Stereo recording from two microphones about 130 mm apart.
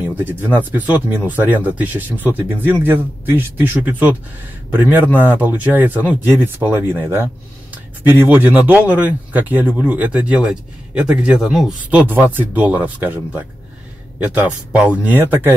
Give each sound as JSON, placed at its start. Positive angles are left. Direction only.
{"t": 0.2, "sound": "speech", "side_deg": -15}